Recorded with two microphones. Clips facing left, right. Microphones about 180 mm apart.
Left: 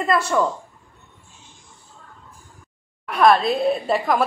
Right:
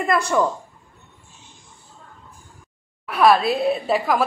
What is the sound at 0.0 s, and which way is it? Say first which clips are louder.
Speech: even; 15° right (ahead or behind).